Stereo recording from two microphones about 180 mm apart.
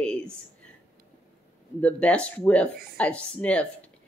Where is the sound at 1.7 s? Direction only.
5° left (ahead or behind).